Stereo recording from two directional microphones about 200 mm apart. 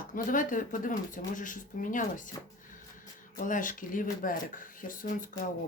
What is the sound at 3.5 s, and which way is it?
Speech, 40° left (ahead or behind).